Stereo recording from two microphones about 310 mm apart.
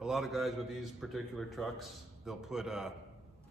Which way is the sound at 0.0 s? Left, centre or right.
Centre.